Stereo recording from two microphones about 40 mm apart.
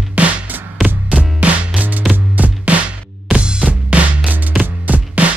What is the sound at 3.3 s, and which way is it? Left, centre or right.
Music, right.